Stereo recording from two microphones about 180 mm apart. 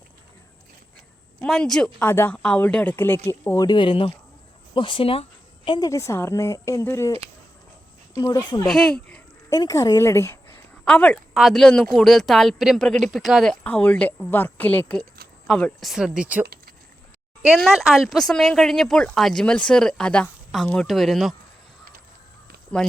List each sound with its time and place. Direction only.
1.4 s speech: centre (ahead or behind)
8.1 s speech: 20° left (ahead or behind)
8.6 s speech: 5° left (ahead or behind)
9.5 s speech: 20° left (ahead or behind); by 16.5 s 5° right (ahead or behind)
17.5 s speech: centre (ahead or behind)
22.7 s speech: 5° left (ahead or behind)